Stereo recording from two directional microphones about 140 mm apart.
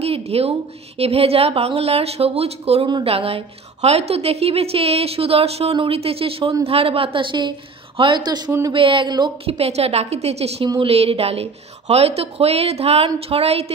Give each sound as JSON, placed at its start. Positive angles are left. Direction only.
{"t": 0.0, "sound": "a woman's voice", "side_deg": -45}
{"t": 8.5, "sound": "speech", "side_deg": -15}
{"t": 8.7, "sound": "a woman's voice", "side_deg": -35}
{"t": 9.6, "sound": "a woman's voice", "side_deg": -45}